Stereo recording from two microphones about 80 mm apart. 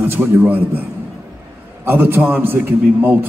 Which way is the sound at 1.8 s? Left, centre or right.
Right.